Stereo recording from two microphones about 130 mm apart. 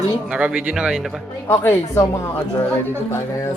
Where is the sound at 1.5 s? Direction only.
15° left (ahead or behind).